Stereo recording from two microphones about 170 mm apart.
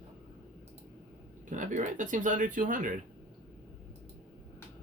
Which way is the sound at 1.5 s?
45° right (ahead or behind).